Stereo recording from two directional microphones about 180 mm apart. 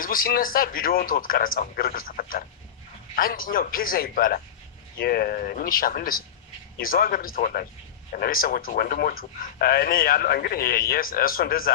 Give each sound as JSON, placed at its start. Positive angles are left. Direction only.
{"t": 0.0, "sound": "speech", "side_deg": 50}